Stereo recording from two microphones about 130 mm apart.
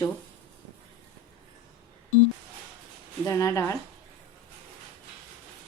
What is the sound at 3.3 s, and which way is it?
Speech, 25° left (ahead or behind).